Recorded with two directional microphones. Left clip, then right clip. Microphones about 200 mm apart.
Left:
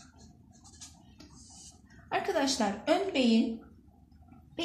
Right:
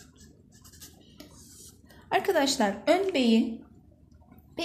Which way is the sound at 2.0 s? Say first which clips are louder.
Right 5 dB; 50° right (ahead or behind).